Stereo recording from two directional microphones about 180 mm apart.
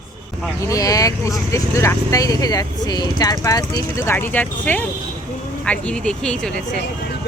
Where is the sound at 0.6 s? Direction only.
20° left (ahead or behind); by 6.8 s 5° left (ahead or behind).